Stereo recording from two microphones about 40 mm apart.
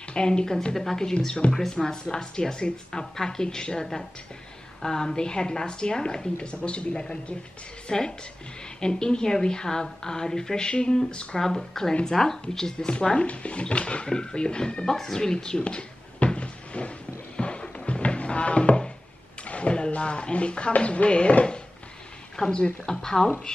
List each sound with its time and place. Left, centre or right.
0.1 s a woman's voice: left
1.2 s a woman's voice: left
1.5 s a woman's voice: centre
14.9 s cupboard open or close: centre; by 16.9 s left
17.4 s music: left
19.4 s a woman's voice: left